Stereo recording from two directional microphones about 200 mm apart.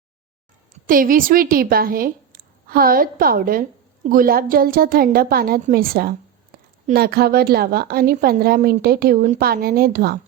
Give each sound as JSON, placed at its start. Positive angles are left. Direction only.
{"t": 0.7, "sound": "a woman's voice", "side_deg": -45}